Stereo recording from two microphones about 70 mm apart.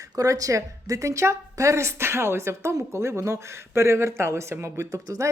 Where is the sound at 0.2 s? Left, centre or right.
Right.